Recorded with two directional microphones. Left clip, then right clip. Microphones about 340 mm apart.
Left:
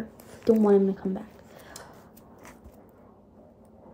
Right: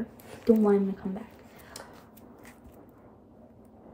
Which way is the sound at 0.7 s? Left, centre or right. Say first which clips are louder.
Left 4 dB; left.